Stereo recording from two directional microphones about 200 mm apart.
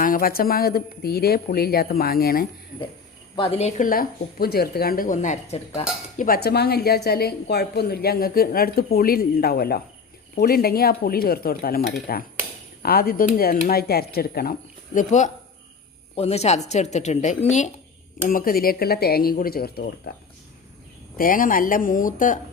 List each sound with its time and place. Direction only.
0.0 s a woman's voice: 45° left (ahead or behind)
3.3 s speech: 30° left (ahead or behind)
6.1 s a woman's voice: 45° left (ahead or behind)
14.9 s a woman's voice: 35° left (ahead or behind)
21.2 s a woman's voice: 45° left (ahead or behind)